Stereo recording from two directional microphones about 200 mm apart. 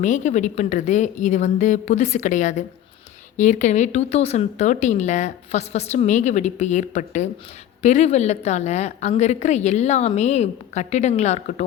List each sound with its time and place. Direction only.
0.0 s speech: 35° left (ahead or behind)